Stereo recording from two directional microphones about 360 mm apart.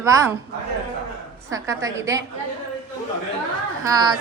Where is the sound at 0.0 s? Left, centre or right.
Centre.